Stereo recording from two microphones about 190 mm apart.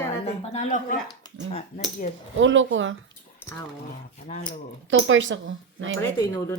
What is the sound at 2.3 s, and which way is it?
Speech, 85° right.